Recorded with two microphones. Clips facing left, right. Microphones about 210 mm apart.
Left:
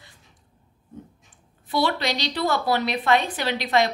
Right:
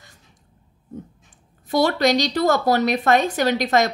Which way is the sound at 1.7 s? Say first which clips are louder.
Right 6 dB; 45° right (ahead or behind).